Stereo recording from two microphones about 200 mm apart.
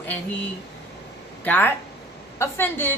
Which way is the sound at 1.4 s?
10° left (ahead or behind).